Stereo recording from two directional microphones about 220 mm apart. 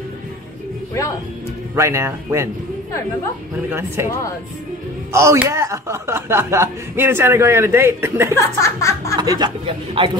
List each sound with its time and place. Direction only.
1.8 s speech: 10° right (ahead or behind)
3.7 s speech: 10° right (ahead or behind)
5.1 s speech: 10° right (ahead or behind)
8.4 s speech: 15° left (ahead or behind)
9.2 s a man's voice: 20° right (ahead or behind)